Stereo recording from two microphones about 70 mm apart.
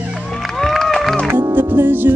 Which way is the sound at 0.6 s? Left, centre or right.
Centre.